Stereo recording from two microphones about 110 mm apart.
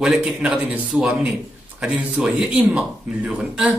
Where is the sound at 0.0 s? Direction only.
5° right (ahead or behind).